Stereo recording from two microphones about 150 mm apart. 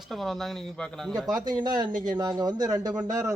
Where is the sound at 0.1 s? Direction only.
Centre (ahead or behind).